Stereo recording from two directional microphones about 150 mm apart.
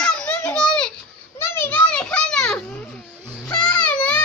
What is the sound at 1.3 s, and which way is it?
Children playing, 15° left (ahead or behind).